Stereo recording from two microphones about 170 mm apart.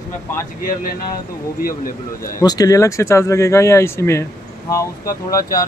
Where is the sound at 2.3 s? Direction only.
20° left (ahead or behind).